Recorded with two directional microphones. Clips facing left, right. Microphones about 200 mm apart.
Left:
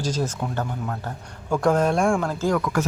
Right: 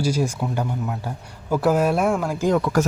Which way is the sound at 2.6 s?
40° right (ahead or behind).